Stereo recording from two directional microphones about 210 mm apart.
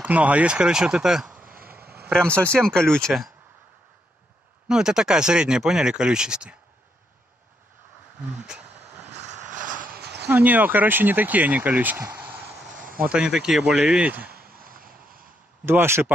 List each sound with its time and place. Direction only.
0.0 s speech: 5° right (ahead or behind)
2.3 s speech: 5° left (ahead or behind)
4.6 s speech: 5° right (ahead or behind)
9.1 s a sound: 35° right (ahead or behind); by 10.3 s 50° right (ahead or behind)
10.3 s speech: 10° right (ahead or behind)
12.7 s a sound: 40° right (ahead or behind)
13.0 s speech: 5° right (ahead or behind)
14.2 s a sound: 45° right (ahead or behind)
15.6 s speech: 10° right (ahead or behind)